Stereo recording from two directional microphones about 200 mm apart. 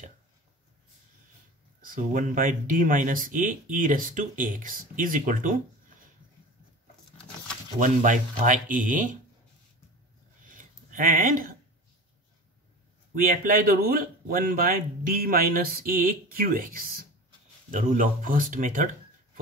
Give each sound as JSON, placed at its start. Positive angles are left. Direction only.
{"t": 1.8, "sound": "speech", "side_deg": -45}
{"t": 7.8, "sound": "speech", "side_deg": -40}
{"t": 10.4, "sound": "a sound", "side_deg": -40}
{"t": 13.1, "sound": "speech", "side_deg": -45}